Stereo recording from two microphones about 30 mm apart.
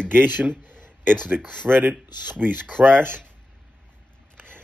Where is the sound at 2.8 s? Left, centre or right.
Right.